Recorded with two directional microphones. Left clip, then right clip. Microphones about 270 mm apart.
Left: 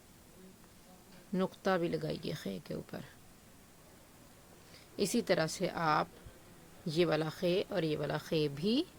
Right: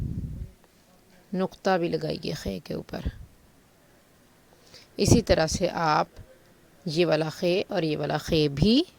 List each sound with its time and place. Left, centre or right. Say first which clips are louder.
1.3 s a woman's voice: right 8 dB; centre
4.9 s a woman's voice: right 10 dB; right